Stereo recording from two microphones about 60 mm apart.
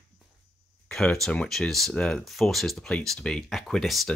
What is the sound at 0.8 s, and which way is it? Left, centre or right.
Speech, centre.